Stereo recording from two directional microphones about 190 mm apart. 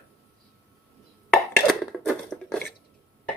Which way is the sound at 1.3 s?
Centre (ahead or behind).